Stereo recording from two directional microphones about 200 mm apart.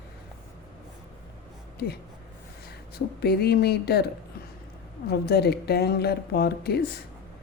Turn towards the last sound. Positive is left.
turn(degrees=50)  # may be behind; listen again after turning